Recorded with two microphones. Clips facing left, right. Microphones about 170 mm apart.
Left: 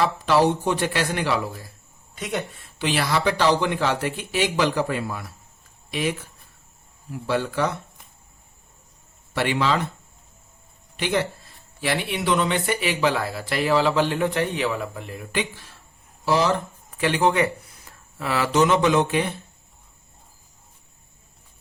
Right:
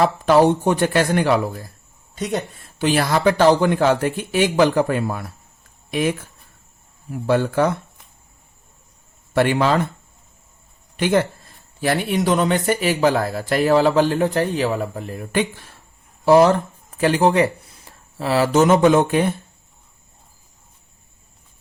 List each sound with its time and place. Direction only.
0.0 s speech: 50° right (ahead or behind)
2.1 s speech: 40° right (ahead or behind)
7.3 s speech: 50° right (ahead or behind)
9.3 s speech: 50° right (ahead or behind)
10.9 s speech: 50° right (ahead or behind)
17.0 s speech: 40° right (ahead or behind)